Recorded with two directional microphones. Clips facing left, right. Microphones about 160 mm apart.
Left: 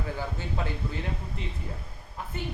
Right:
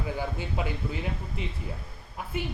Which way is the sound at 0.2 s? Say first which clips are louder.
Right 1 dB; 15° right (ahead or behind).